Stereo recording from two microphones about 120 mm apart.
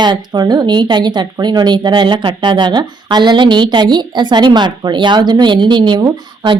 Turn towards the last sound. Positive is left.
turn(degrees=-35)  # may be behind; listen again after turning